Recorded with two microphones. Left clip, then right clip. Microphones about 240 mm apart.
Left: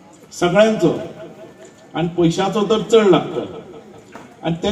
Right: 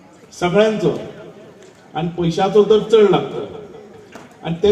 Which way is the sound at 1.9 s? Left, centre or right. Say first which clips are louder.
Left 3 dB; left.